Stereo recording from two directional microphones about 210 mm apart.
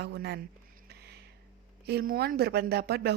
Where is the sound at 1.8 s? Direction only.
45° right (ahead or behind).